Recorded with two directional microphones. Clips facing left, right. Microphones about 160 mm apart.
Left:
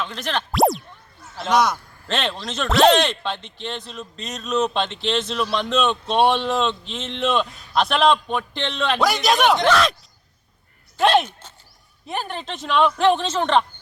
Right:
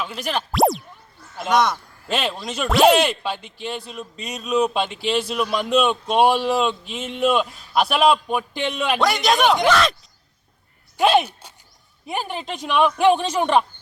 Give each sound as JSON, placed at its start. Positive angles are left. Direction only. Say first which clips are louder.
{"t": 0.0, "sound": "a man's voice", "louder": "right 1 dB", "side_deg": -10}
{"t": 9.0, "sound": "a man's voice", "louder": "even", "side_deg": 0}
{"t": 10.9, "sound": "speech", "louder": "even", "side_deg": -5}